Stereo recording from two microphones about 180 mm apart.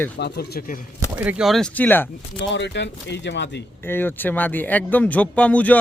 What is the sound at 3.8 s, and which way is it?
Speech, 10° left (ahead or behind).